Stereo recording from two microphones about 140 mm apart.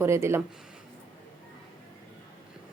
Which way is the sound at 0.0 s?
20° right (ahead or behind).